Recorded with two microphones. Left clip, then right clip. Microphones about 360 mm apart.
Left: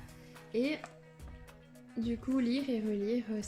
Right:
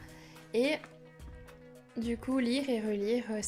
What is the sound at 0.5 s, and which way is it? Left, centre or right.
Speech, centre.